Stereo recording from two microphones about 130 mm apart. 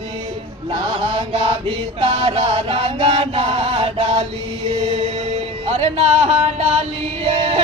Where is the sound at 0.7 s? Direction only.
40° right (ahead or behind).